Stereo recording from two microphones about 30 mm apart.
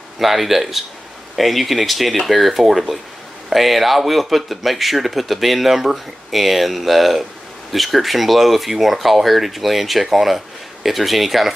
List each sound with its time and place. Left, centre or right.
0.2 s speech: centre